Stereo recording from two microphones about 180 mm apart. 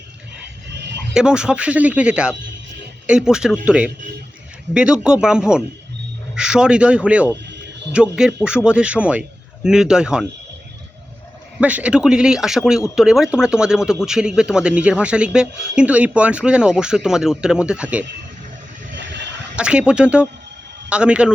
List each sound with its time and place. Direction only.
0.7 s a sound: 75° right (ahead or behind)
1.1 s speech: 5° right (ahead or behind)
11.6 s speech: 5° right (ahead or behind)
19.5 s speech: 5° right (ahead or behind)